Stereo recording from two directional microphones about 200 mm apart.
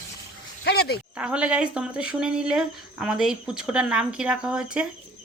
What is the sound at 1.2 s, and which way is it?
Speech, 5° right (ahead or behind).